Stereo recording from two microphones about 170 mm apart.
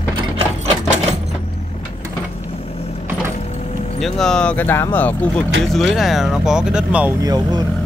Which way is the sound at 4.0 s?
Centre (ahead or behind).